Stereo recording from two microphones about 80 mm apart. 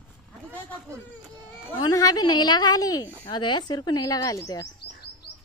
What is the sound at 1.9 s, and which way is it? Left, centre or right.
Speech, left.